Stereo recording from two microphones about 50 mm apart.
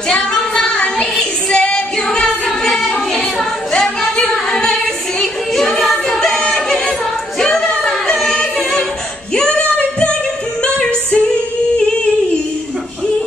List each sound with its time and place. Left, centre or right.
0.1 s female singing: centre
1.5 s music: centre
4.2 s singing: centre
5.2 s music: centre
7.3 s singing: centre
9.3 s female singing: centre
10.6 s music: centre